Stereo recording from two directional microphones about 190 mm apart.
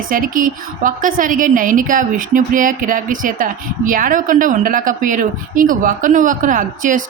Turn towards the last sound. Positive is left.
turn(degrees=-45)  # may be behind; listen again after turning